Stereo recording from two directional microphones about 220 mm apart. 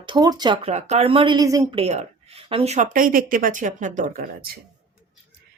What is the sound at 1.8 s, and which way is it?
Speech, 30° right (ahead or behind).